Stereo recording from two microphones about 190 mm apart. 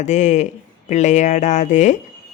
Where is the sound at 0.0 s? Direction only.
40° left (ahead or behind).